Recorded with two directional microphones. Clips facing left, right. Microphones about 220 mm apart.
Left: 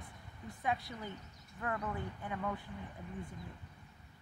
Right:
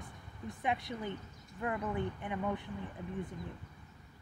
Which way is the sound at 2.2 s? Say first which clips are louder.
Right 3 dB; 20° right (ahead or behind).